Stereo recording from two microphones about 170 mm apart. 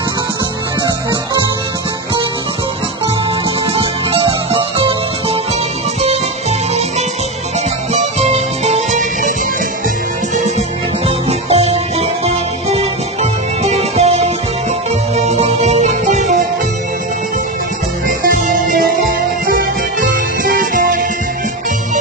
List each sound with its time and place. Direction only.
3.7 s music: 35° right (ahead or behind)
7.9 s music: 40° right (ahead or behind)
11.1 s music: 35° right (ahead or behind)
18.0 s music: 55° right (ahead or behind)
20.0 s music: 55° right (ahead or behind)